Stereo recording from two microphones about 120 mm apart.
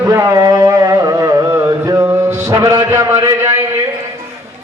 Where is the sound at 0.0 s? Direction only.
30° right (ahead or behind).